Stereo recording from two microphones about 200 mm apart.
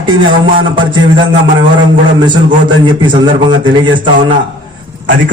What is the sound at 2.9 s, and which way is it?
Speech, 25° right (ahead or behind).